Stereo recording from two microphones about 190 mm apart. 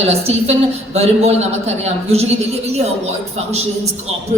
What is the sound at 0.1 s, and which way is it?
A woman's voice, 35° right (ahead or behind).